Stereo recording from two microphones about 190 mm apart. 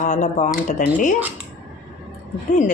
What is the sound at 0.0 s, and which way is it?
Speech, 40° left (ahead or behind).